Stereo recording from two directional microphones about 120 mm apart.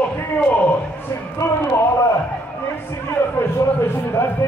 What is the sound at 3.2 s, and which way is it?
A man's voice, 20° left (ahead or behind).